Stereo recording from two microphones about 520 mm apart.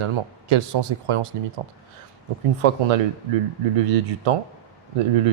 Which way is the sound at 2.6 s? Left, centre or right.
Right.